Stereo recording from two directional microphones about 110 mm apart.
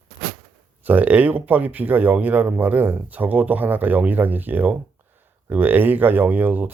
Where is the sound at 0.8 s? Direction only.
15° right (ahead or behind).